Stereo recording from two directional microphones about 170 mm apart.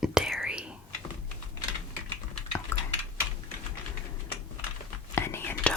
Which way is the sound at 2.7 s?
15° left (ahead or behind).